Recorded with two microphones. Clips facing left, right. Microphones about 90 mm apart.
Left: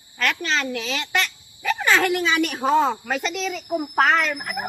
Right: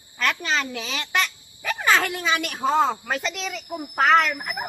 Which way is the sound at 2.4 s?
Centre (ahead or behind).